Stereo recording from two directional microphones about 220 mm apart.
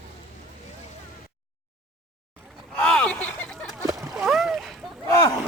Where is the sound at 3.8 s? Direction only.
15° right (ahead or behind).